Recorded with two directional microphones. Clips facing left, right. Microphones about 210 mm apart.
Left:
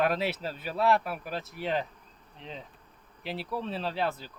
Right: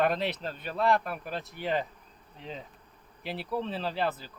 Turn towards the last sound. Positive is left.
turn(degrees=0)  # may be behind; listen again after turning